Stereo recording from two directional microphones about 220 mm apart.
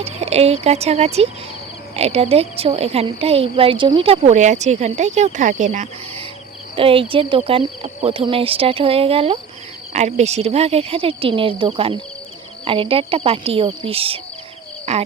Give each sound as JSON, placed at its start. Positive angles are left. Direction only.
{"t": 0.0, "sound": "a woman's voice", "side_deg": -30}